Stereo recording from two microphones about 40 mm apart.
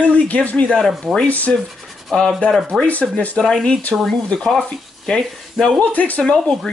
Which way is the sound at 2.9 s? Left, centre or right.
Left.